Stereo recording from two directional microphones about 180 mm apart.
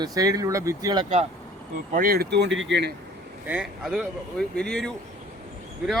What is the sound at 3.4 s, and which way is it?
Speech, 5° right (ahead or behind).